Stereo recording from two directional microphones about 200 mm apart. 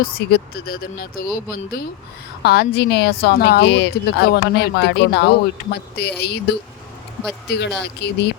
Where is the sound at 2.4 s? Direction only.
55° left (ahead or behind).